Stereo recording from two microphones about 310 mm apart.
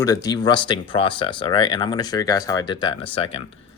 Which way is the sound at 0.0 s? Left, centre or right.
Centre.